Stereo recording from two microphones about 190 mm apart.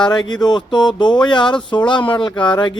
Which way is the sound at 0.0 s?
25° left (ahead or behind).